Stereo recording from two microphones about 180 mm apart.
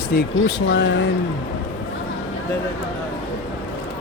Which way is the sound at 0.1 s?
65° left (ahead or behind).